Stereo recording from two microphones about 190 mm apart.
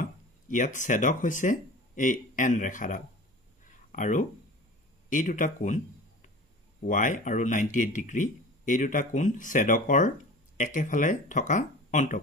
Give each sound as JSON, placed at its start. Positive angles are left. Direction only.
{"t": 0.0, "sound": "speech", "side_deg": 40}
{"t": 3.6, "sound": "a sound", "side_deg": 40}
{"t": 5.1, "sound": "speech", "side_deg": 45}
{"t": 6.9, "sound": "speech", "side_deg": 45}